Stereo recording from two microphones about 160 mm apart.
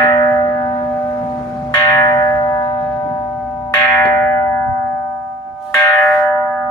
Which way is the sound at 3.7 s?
20° left (ahead or behind).